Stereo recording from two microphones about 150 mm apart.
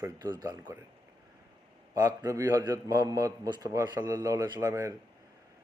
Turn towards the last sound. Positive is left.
turn(degrees=-20)  # may be behind; listen again after turning